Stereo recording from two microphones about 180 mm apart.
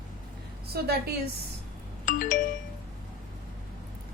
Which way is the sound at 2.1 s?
50° left (ahead or behind).